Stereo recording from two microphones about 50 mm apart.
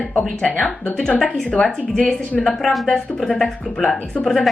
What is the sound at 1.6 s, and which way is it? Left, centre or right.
Speech, centre.